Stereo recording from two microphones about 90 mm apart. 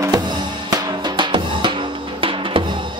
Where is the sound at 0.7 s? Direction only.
55° right (ahead or behind).